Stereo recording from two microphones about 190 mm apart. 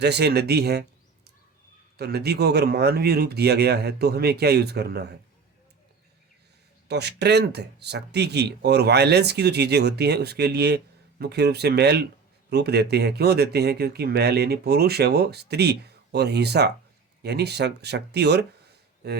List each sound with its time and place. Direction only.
0.0 s speech: 60° right (ahead or behind)
6.8 s speech: 60° right (ahead or behind)